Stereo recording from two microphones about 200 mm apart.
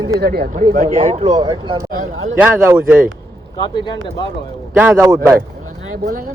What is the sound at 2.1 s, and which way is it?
Speech, 80° right.